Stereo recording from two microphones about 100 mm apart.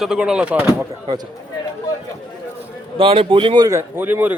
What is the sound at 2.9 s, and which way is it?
Speech, 65° right (ahead or behind).